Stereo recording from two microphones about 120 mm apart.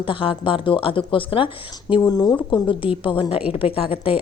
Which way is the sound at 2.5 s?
45° left (ahead or behind).